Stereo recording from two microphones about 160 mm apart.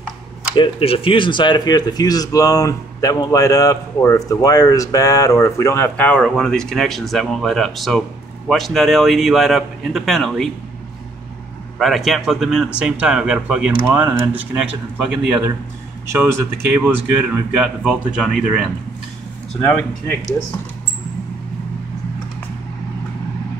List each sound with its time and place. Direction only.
0.6 s speech: 35° left (ahead or behind); by 10.5 s centre (ahead or behind)
11.8 s speech: centre (ahead or behind)
16.6 s speech: 10° right (ahead or behind)
19.6 s speech: 10° left (ahead or behind)